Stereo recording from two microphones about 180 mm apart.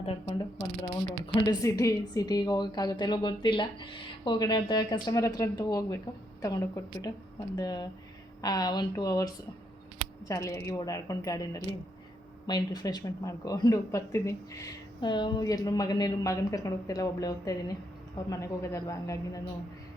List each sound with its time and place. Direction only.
0.0 s speech: 30° left (ahead or behind)
1.5 s a man's voice: 20° left (ahead or behind)